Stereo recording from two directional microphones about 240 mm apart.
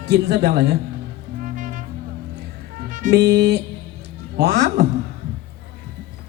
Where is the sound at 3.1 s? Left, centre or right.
Right.